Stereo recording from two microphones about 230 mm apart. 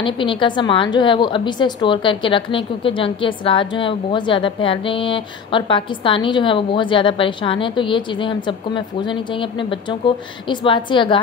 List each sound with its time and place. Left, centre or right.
0.0 s a woman's voice: left